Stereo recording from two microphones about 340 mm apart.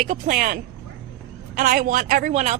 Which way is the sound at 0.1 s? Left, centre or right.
Right.